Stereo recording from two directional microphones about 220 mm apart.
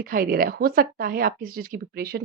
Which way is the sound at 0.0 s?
40° right (ahead or behind).